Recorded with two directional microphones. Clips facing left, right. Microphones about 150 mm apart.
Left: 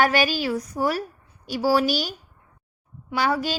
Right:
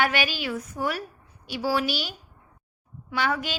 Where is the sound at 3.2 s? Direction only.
35° left (ahead or behind).